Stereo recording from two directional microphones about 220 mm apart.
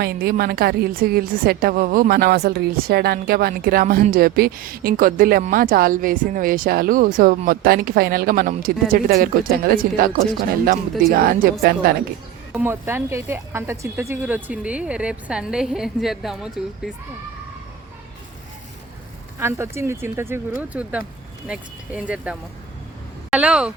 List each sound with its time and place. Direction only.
0.0 s a woman's voice: 45° right (ahead or behind)
11.1 s a woman's voice: 40° right (ahead or behind)
12.5 s speech: 10° right (ahead or behind)
19.4 s speech: 10° right (ahead or behind)